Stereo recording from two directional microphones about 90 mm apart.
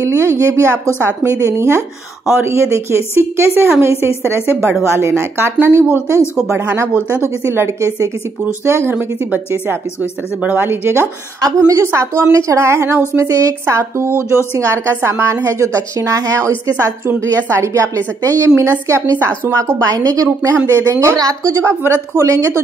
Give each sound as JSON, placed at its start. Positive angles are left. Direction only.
{"t": 0.0, "sound": "a woman's voice", "side_deg": -35}
{"t": 4.8, "sound": "a woman's voice", "side_deg": -30}
{"t": 11.4, "sound": "a woman's voice", "side_deg": -40}